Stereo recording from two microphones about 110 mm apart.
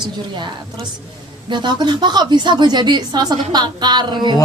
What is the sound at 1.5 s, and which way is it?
A woman's voice, 45° right (ahead or behind).